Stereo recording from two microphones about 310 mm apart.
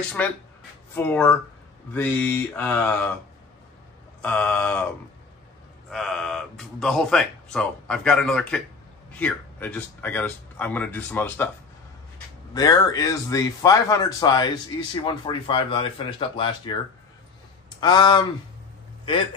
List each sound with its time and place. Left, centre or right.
0.2 s speech: centre
4.2 s speech: centre
5.9 s speech: centre
12.5 s speech: centre
17.7 s speech: centre